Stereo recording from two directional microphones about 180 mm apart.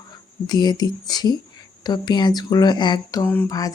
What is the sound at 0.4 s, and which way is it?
Speech, 25° left (ahead or behind).